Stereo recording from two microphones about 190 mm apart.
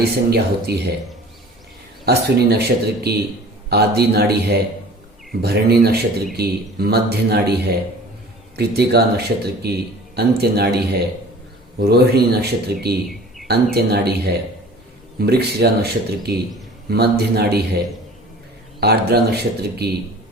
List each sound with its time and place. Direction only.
0.0 s speech: 60° right (ahead or behind)
2.0 s speech: 55° right (ahead or behind)
11.8 s speech: 55° right (ahead or behind)
13.1 s a sound: centre (ahead or behind)
13.5 s speech: 60° right (ahead or behind)
15.2 s speech: 55° right (ahead or behind)
18.8 s speech: 60° right (ahead or behind)